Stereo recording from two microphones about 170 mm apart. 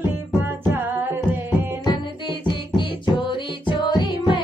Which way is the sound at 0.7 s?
10° right (ahead or behind).